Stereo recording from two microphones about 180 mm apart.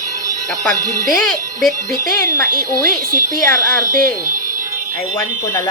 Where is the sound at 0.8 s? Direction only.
20° right (ahead or behind).